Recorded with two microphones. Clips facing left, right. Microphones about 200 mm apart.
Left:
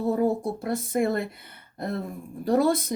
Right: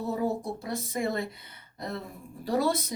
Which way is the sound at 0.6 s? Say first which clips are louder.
Left 6 dB; 55° left (ahead or behind).